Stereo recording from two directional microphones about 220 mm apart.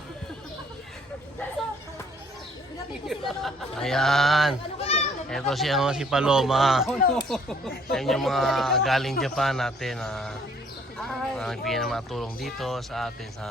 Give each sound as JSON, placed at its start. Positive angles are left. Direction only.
{"t": 3.1, "sound": "speech", "side_deg": 0}
{"t": 4.8, "sound": "children playing", "side_deg": 30}
{"t": 5.3, "sound": "speech", "side_deg": 0}